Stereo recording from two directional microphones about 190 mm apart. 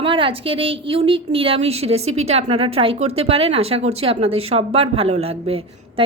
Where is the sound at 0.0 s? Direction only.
30° right (ahead or behind).